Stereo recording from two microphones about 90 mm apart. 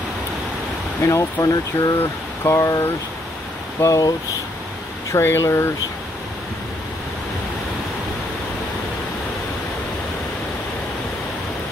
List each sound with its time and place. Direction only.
1.0 s speech: 35° left (ahead or behind)
2.0 s a sound: 30° left (ahead or behind)
3.8 s speech: 40° left (ahead or behind)
5.1 s speech: 30° left (ahead or behind)